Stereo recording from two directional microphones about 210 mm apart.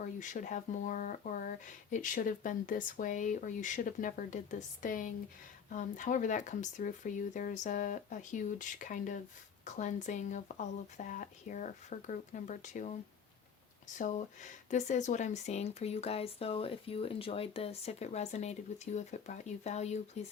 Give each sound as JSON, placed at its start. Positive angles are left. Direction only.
{"t": 0.0, "sound": "speech", "side_deg": 35}
{"t": 14.0, "sound": "speech", "side_deg": 35}